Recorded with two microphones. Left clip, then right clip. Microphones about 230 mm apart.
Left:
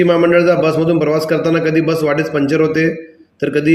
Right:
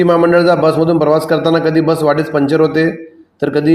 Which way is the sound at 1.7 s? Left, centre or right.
Right.